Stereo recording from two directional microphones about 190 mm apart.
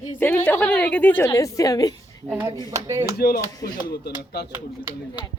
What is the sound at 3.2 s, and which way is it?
Speech, 55° left (ahead or behind).